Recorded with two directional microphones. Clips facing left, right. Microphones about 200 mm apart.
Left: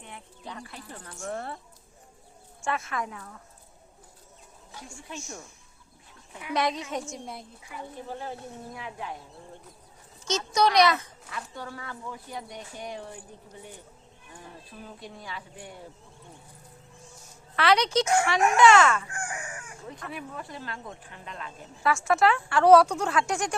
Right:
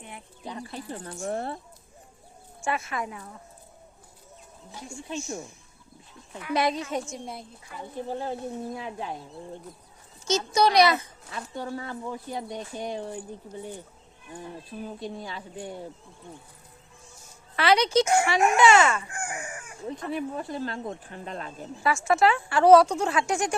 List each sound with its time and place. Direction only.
0.0 s speech: 15° right (ahead or behind)
0.6 s speech: 30° right (ahead or behind)
2.6 s speech: 5° right (ahead or behind)
4.7 s speech: 25° right (ahead or behind)
6.5 s speech: 5° right (ahead or behind)
8.1 s speech: 25° right (ahead or behind)
10.2 s speech: 5° right (ahead or behind)
11.3 s speech: 30° right (ahead or behind)
14.8 s speech: 25° right (ahead or behind)
17.6 s speech: 5° right (ahead or behind)
18.3 s speech: 30° right (ahead or behind)
18.6 s speech: 5° right (ahead or behind)
19.9 s speech: 30° right (ahead or behind)
21.8 s speech: centre (ahead or behind)